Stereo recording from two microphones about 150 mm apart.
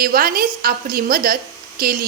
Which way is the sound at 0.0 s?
80° right.